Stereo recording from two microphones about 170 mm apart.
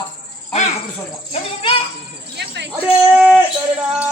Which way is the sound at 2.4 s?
90° right.